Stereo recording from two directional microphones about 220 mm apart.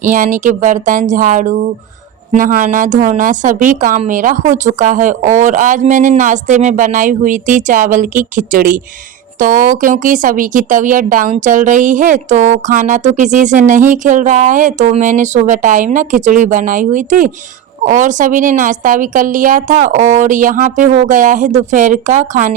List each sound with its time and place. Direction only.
0.0 s speech: 35° right (ahead or behind)